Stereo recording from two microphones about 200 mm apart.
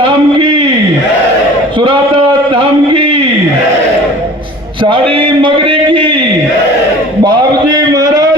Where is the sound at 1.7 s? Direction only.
25° right (ahead or behind).